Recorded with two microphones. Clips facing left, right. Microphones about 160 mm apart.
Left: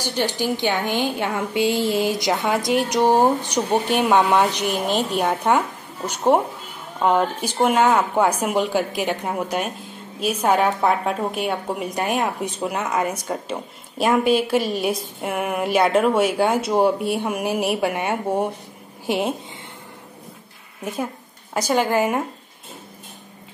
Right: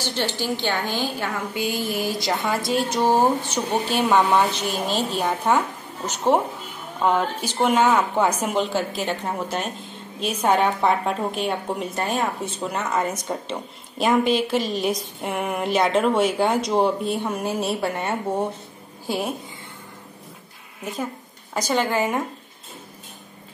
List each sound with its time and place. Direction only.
0.0 s a woman's voice: 10° left (ahead or behind)
20.8 s a woman's voice: 10° left (ahead or behind)